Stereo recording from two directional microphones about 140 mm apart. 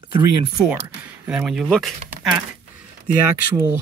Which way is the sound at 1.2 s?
5° right (ahead or behind).